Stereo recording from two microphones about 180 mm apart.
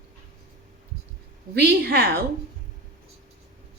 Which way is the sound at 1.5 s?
60° right (ahead or behind).